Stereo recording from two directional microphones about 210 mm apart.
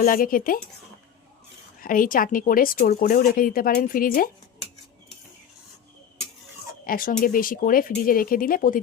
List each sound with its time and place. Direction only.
0.0 s speech: 40° left (ahead or behind)
1.8 s speech: 40° left (ahead or behind)
6.8 s speech: 40° left (ahead or behind)